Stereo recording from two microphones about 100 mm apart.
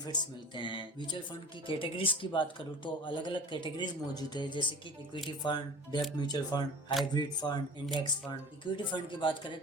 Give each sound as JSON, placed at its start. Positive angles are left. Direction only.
{"t": 0.0, "sound": "speech", "side_deg": 50}
{"t": 1.6, "sound": "speech", "side_deg": 60}